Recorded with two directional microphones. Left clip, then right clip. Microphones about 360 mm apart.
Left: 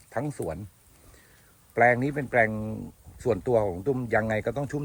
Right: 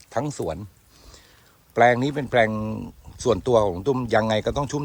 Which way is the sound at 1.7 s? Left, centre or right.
Centre.